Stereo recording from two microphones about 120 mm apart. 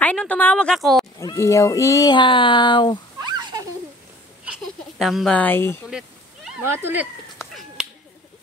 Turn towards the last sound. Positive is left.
turn(degrees=0)  # may be behind; listen again after turning